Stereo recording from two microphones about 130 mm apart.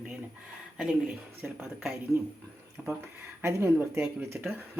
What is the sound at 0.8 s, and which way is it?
Speech, 5° right (ahead or behind).